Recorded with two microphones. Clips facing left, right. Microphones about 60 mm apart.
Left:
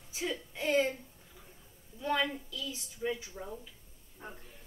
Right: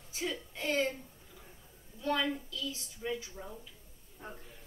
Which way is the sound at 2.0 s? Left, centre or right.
Centre.